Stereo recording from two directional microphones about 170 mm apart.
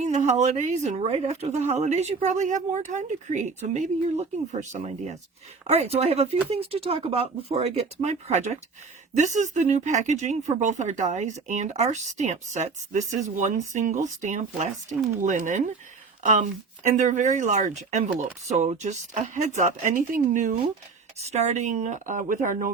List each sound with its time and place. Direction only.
0.0 s speech: 45° right (ahead or behind)